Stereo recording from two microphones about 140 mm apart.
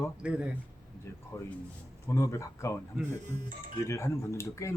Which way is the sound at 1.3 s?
20° left (ahead or behind).